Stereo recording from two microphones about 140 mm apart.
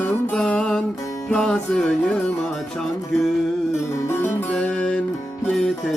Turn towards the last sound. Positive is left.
turn(degrees=5)  # may be behind; listen again after turning